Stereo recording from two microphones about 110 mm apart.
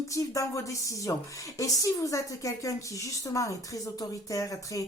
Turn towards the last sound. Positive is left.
turn(degrees=30)  # may be behind; listen again after turning